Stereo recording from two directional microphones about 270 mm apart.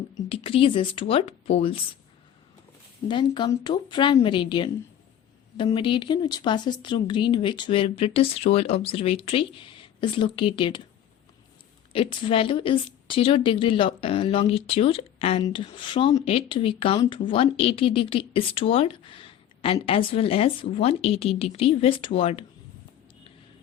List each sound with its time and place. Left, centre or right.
0.1 s speech: centre
3.1 s a woman's voice: centre
11.9 s speech: centre